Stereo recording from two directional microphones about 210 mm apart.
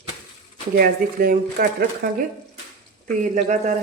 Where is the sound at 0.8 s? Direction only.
45° right (ahead or behind).